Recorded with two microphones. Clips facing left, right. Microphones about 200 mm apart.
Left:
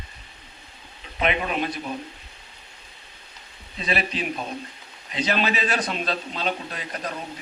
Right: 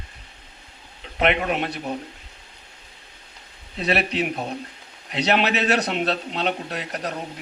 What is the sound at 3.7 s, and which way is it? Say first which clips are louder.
Speech: right 4 dB; 70° right (ahead or behind).